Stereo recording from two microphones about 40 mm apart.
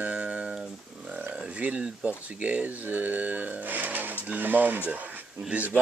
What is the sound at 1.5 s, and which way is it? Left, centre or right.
Speech, right.